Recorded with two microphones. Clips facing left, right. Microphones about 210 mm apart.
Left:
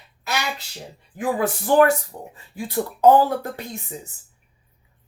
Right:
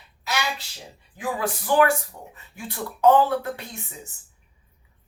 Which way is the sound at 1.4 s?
45° left (ahead or behind).